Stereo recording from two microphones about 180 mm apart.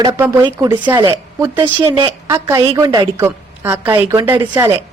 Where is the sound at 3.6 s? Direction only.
10° right (ahead or behind).